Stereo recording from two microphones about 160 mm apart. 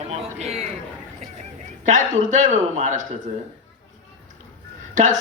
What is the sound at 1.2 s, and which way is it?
A man's voice, 50° right (ahead or behind).